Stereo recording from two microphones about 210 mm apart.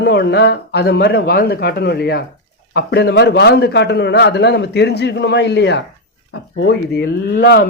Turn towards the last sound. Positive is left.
turn(degrees=45)  # may be behind; listen again after turning